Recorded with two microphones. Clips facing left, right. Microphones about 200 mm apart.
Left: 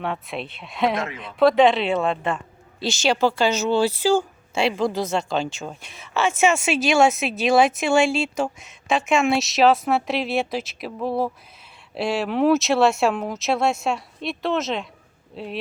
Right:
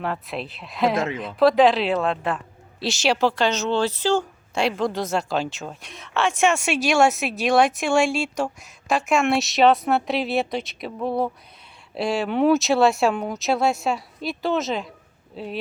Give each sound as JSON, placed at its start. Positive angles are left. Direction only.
{"t": 0.0, "sound": "a woman's voice", "side_deg": 0}
{"t": 0.9, "sound": "speech", "side_deg": -25}
{"t": 1.2, "sound": "a woman's voice", "side_deg": 0}